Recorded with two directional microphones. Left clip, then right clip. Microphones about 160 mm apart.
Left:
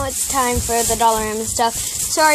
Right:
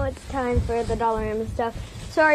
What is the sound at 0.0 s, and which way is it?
Sizzle, 50° left (ahead or behind).